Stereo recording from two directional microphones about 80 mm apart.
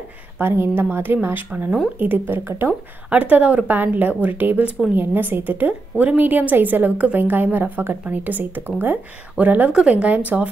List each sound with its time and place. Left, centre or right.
0.4 s a woman's voice: right
3.2 s a woman's voice: centre